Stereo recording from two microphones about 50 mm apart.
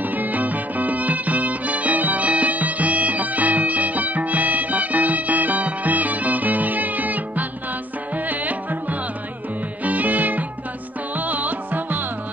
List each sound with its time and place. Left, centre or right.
0.0 s music: right